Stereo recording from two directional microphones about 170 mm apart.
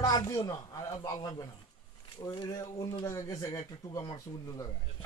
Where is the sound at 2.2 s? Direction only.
25° left (ahead or behind).